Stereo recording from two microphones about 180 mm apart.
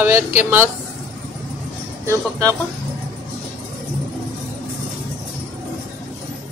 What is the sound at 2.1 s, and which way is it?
Speech, 15° right (ahead or behind).